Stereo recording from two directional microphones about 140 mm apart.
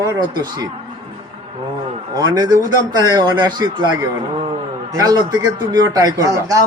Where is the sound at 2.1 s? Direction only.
30° right (ahead or behind).